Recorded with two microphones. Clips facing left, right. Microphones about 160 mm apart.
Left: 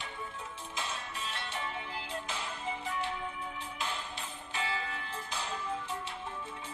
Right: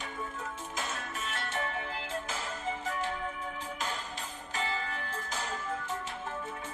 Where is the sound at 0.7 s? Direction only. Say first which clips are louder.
Even; 50° right (ahead or behind).